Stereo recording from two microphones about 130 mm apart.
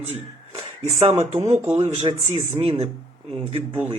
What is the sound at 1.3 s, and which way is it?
Speech, 50° right (ahead or behind).